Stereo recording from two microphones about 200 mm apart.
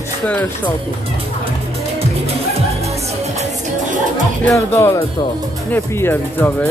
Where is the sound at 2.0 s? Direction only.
30° right (ahead or behind).